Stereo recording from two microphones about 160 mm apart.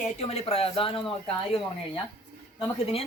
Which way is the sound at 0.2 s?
40° left (ahead or behind).